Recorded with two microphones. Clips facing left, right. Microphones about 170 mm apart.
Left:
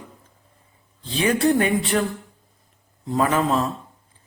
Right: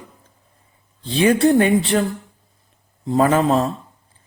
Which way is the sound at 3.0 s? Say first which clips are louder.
Right 5 dB; 30° right (ahead or behind).